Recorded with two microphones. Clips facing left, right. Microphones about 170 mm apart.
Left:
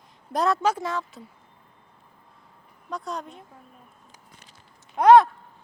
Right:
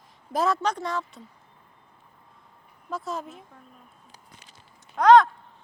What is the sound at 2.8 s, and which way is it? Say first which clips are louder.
Speech: right 1 dB; centre (ahead or behind).